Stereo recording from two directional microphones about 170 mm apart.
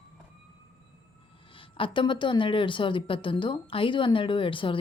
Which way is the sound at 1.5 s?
30° left (ahead or behind).